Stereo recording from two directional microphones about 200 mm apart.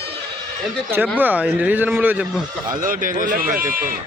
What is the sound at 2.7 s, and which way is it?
Speech, 45° right (ahead or behind).